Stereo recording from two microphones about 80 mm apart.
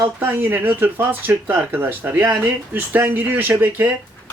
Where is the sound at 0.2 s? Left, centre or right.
Right.